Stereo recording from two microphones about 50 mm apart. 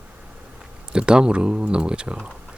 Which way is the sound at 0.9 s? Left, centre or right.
Centre.